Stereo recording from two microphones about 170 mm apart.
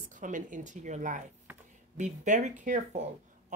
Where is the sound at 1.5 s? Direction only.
10° right (ahead or behind).